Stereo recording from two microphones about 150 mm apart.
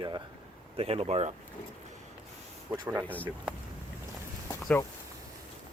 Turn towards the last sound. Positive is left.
turn(degrees=20)  # may be behind; listen again after turning